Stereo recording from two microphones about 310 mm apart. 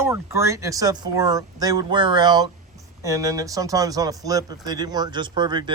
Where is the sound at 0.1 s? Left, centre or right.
Centre.